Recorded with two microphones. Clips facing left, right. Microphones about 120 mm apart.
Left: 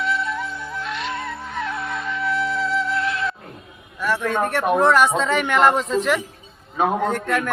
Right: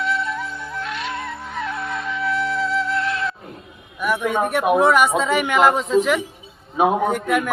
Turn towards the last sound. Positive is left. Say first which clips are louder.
# right 2 dB
turn(degrees=-10)  # may be behind; listen again after turning